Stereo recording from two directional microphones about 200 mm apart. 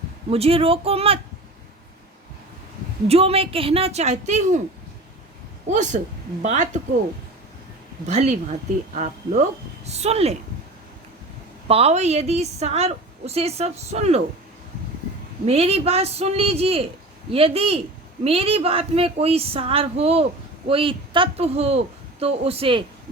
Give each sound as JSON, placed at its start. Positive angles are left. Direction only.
{"t": 0.3, "sound": "a woman's voice", "side_deg": -30}
{"t": 3.1, "sound": "a woman's voice", "side_deg": -30}
{"t": 5.6, "sound": "a woman's voice", "side_deg": -35}
{"t": 8.0, "sound": "a woman's voice", "side_deg": -35}
{"t": 11.7, "sound": "a woman's voice", "side_deg": -30}
{"t": 15.4, "sound": "a woman's voice", "side_deg": -30}